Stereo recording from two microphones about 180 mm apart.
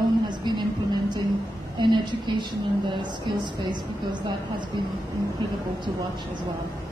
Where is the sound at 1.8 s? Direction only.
25° right (ahead or behind).